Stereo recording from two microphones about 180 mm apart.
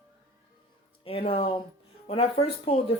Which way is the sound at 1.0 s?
30° left (ahead or behind).